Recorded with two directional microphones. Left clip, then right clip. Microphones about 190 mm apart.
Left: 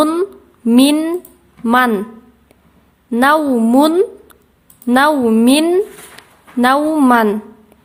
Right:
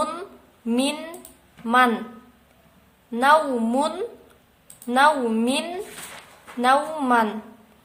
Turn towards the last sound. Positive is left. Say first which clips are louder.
# left 9 dB
turn(degrees=45)  # may be behind; listen again after turning